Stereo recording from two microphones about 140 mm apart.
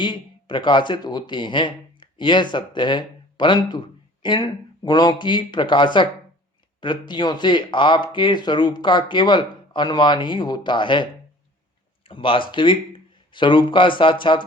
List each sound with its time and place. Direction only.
0.0 s speech: 35° left (ahead or behind)